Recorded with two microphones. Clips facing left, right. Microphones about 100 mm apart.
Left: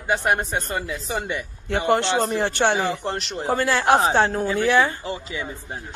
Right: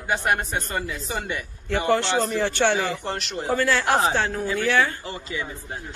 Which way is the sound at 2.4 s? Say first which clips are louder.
Left 1 dB; 55° left (ahead or behind).